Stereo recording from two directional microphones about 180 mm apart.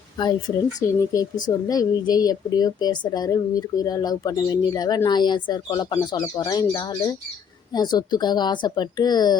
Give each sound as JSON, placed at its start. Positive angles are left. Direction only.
{"t": 0.2, "sound": "speech", "side_deg": 25}